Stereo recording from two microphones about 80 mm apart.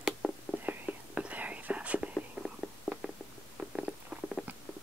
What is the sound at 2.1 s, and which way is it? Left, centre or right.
Whispering, centre.